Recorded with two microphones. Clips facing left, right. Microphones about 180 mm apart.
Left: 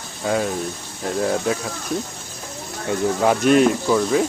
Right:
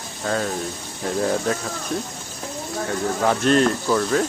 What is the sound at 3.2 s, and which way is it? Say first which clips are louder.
Speech: left 3 dB; 10° left (ahead or behind).